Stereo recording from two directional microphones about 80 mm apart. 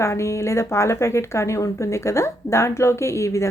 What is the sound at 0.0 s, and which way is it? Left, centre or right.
Speech, left.